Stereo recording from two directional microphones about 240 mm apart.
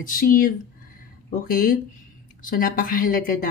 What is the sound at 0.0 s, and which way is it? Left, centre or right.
Speech, left.